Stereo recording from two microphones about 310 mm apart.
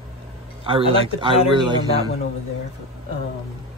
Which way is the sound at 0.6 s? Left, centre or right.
Centre.